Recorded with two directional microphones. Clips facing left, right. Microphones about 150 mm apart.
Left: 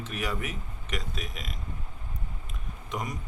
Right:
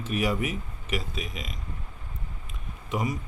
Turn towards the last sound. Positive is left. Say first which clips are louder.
# right 5 dB
turn(degrees=-5)  # may be behind; listen again after turning